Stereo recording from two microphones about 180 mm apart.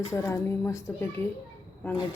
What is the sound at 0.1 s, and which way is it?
Speech, 15° left (ahead or behind).